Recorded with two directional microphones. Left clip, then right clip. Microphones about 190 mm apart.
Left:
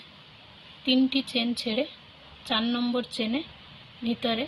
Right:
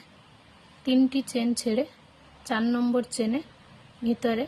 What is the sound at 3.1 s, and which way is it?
A woman's voice, 15° right (ahead or behind).